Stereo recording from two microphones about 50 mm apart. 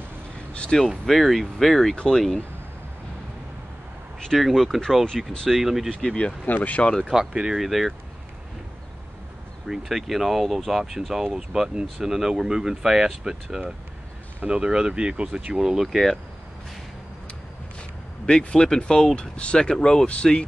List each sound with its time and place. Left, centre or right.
0.5 s a sound: left
1.0 s speech: centre
4.3 s speech: centre
5.5 s speech: centre
5.9 s speech: centre
6.4 s speech: left
7.1 s speech: centre
9.7 s speech: centre
15.9 s speech: centre
18.2 s speech: centre